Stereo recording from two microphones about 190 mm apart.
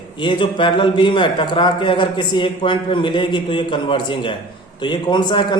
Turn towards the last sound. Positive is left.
turn(degrees=25)  # may be behind; listen again after turning